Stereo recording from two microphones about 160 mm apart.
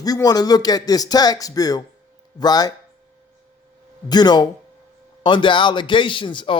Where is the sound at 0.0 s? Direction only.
25° left (ahead or behind).